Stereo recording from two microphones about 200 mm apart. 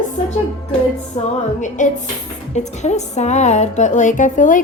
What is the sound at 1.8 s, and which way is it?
Speech, 40° left (ahead or behind).